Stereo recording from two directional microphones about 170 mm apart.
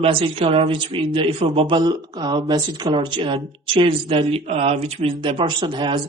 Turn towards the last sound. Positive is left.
turn(degrees=-30)  # may be behind; listen again after turning